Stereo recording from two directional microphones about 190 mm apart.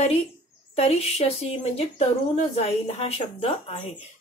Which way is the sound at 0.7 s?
30° left (ahead or behind).